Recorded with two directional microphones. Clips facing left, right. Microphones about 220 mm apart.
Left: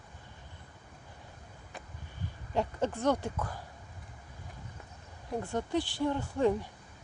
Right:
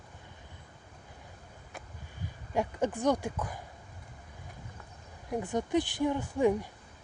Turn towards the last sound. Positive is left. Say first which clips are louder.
# right 1 dB
turn(degrees=-15)  # may be behind; listen again after turning